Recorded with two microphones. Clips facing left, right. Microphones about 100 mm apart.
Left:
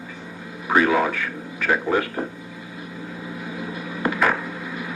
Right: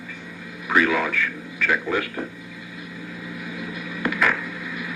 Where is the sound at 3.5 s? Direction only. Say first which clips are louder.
Left 2 dB; 30° left (ahead or behind).